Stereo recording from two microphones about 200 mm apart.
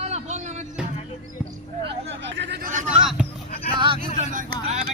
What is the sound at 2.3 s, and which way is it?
Hubbub, 60° right (ahead or behind).